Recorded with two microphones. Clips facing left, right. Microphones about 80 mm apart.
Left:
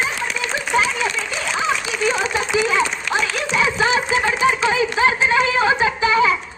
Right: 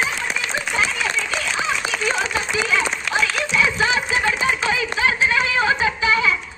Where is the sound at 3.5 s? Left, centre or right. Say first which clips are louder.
Left 3 dB; left.